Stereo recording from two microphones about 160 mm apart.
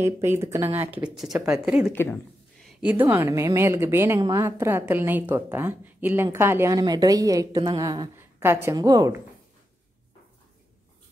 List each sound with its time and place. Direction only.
0.4 s a woman's voice: 15° right (ahead or behind)
1.9 s speech: 15° left (ahead or behind)
2.6 s a woman's voice: 10° right (ahead or behind)